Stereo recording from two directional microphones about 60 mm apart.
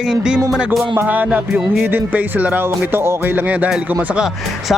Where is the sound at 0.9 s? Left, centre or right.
Right.